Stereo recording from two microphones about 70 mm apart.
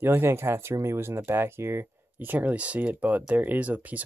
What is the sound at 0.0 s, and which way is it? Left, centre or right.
Speech, right.